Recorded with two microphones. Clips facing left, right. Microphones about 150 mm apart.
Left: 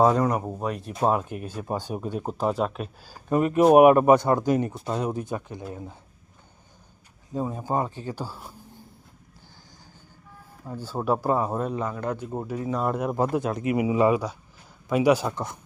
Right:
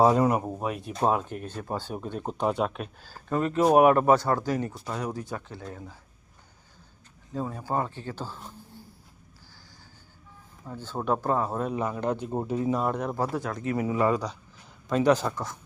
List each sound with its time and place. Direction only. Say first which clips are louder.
0.0 s speech: even; 10° right (ahead or behind)
0.9 s speech: left 2 dB; 10° left (ahead or behind)
3.1 s speech: left 4 dB; 15° left (ahead or behind)
7.3 s speech: left 3 dB; 20° left (ahead or behind)
10.7 s speech: left 2 dB; 10° left (ahead or behind)
11.8 s speech: right 1 dB; 15° right (ahead or behind)
12.7 s speech: left 2 dB; centre (ahead or behind)
13.3 s speech: left 5 dB; 20° left (ahead or behind)